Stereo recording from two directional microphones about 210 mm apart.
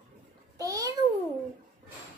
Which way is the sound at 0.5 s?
15° right (ahead or behind).